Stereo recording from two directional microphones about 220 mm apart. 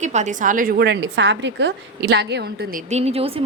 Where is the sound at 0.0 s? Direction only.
35° right (ahead or behind).